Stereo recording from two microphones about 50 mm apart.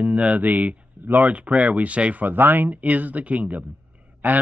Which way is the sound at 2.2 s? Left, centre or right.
Right.